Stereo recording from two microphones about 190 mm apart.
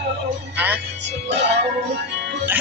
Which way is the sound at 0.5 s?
10° right (ahead or behind).